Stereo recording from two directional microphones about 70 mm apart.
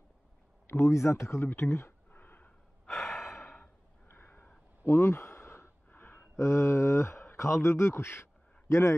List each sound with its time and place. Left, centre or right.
0.7 s speech: left
2.0 s a sound: left
2.9 s gasp: centre
4.1 s crow: left
4.8 s a sound: left
6.3 s a man's voice: left